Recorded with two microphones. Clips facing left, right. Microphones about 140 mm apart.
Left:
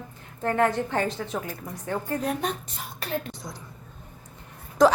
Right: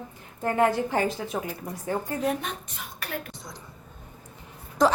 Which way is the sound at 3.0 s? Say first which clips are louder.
Left 4 dB; 30° left (ahead or behind).